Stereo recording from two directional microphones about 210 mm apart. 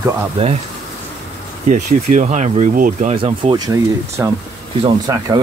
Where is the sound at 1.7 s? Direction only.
35° right (ahead or behind).